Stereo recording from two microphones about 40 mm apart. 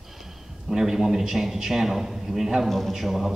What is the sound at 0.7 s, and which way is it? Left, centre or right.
A man's voice, centre.